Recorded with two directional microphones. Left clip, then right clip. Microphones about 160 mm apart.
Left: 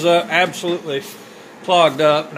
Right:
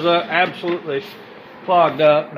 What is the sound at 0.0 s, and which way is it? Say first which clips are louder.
Speech: left 2 dB; 20° left (ahead or behind).